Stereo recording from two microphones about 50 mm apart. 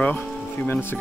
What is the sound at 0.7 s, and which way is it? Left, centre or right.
Speech, left.